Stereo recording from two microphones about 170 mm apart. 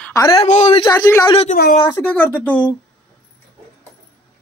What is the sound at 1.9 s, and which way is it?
Speech, 10° left (ahead or behind).